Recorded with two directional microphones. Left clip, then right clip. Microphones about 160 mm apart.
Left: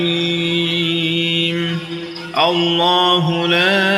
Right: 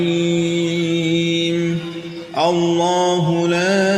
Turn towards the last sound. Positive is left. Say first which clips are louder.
# left 2 dB
turn(degrees=-45)  # may be behind; listen again after turning